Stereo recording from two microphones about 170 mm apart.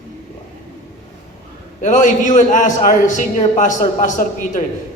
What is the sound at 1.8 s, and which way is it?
A man's voice, 45° left (ahead or behind).